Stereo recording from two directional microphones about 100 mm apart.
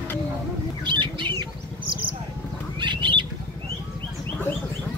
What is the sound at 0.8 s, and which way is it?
Bird, 50° right (ahead or behind).